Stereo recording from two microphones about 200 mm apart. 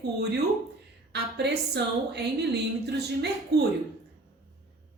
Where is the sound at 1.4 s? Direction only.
55° right (ahead or behind).